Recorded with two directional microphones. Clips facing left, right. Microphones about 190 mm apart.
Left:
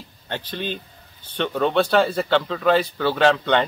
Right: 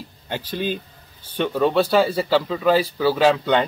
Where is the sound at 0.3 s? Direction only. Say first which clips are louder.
Right 3 dB; 10° right (ahead or behind).